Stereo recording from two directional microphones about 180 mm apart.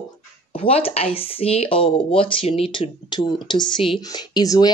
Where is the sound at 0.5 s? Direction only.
35° left (ahead or behind).